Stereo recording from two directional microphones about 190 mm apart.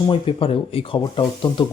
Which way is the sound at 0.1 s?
25° left (ahead or behind).